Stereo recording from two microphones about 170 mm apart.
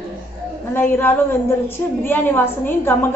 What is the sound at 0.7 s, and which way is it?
A woman's voice, 10° left (ahead or behind).